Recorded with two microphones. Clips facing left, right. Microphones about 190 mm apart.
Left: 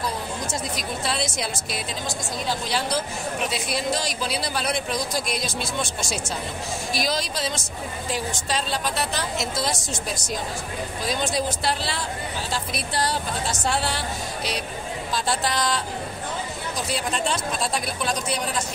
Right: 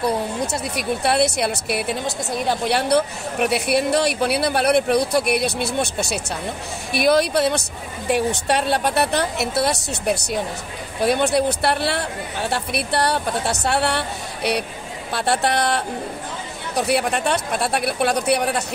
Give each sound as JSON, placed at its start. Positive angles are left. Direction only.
{"t": 0.0, "sound": "a woman's voice", "side_deg": -65}